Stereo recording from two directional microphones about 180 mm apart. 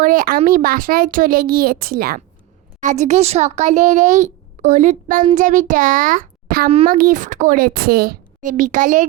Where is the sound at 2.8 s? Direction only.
40° right (ahead or behind).